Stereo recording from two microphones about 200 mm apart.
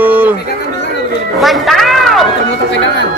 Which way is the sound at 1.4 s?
Centre (ahead or behind).